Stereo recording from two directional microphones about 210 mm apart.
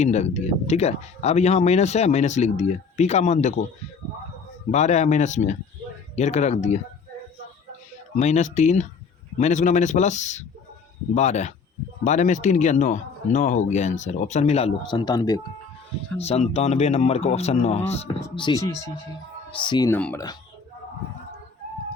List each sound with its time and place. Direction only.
0.0 s speech: 30° left (ahead or behind)
4.7 s speech: 35° left (ahead or behind)
8.1 s speech: 35° left (ahead or behind); by 15.4 s 20° left (ahead or behind)
16.1 s speech: 30° left (ahead or behind)
18.2 s speech: 20° left (ahead or behind)
20.0 s speech: 5° left (ahead or behind)